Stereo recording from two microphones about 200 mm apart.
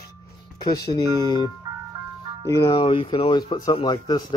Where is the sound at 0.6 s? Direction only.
20° left (ahead or behind).